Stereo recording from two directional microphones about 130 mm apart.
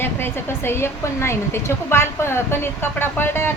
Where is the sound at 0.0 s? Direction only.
15° left (ahead or behind).